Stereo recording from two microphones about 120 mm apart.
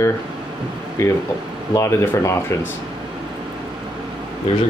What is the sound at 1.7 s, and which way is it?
Speech, 20° left (ahead or behind).